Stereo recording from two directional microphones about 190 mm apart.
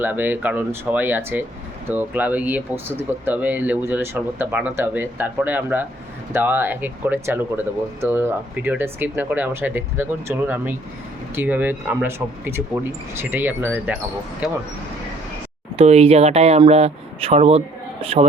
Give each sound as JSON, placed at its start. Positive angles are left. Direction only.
{"t": 0.0, "sound": "speech", "side_deg": -10}
{"t": 15.7, "sound": "speech", "side_deg": -35}